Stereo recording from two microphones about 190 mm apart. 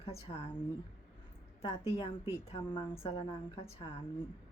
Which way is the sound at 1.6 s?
30° left (ahead or behind).